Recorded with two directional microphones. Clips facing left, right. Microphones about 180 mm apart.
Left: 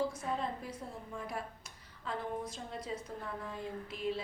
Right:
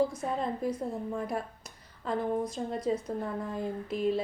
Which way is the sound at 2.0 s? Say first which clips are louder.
Right 8 dB; 40° right (ahead or behind).